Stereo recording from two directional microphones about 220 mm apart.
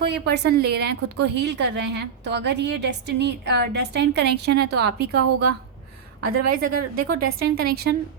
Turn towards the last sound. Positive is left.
turn(degrees=-45)  # may be behind; listen again after turning